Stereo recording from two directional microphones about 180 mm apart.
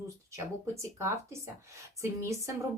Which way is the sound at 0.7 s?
15° right (ahead or behind).